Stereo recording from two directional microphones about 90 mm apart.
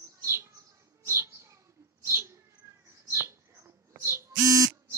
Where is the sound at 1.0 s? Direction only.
30° right (ahead or behind).